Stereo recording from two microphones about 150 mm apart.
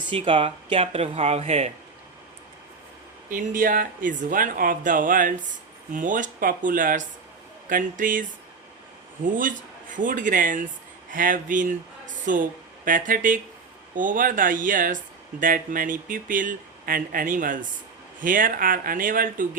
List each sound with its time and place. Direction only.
0.1 s speech: 35° right (ahead or behind)
3.2 s speech: 65° right (ahead or behind)